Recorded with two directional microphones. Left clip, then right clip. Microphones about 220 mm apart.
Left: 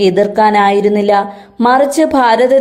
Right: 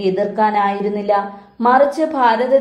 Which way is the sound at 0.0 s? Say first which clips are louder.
Left 7 dB; 45° left (ahead or behind).